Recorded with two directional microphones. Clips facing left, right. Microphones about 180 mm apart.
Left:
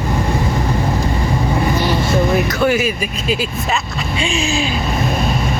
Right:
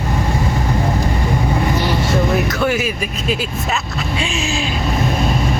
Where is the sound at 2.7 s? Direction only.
Centre (ahead or behind).